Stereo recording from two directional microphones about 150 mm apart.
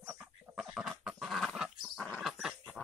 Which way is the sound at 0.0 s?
Centre (ahead or behind).